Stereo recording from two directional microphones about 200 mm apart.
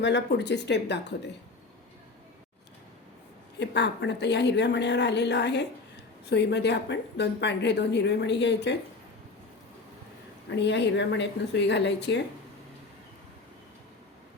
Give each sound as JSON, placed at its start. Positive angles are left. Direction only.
{"t": 0.0, "sound": "a woman's voice", "side_deg": 60}
{"t": 3.6, "sound": "a woman's voice", "side_deg": 60}
{"t": 10.5, "sound": "a woman's voice", "side_deg": 60}